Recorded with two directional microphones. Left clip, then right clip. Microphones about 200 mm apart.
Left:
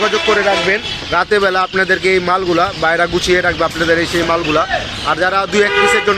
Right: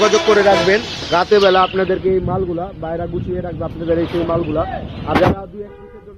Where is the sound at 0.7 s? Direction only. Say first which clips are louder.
Even; 10° right (ahead or behind).